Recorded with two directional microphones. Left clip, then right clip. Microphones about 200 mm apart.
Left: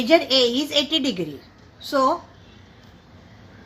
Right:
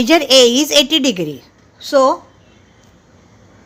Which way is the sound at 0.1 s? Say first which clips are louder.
Right 7 dB; 50° right (ahead or behind).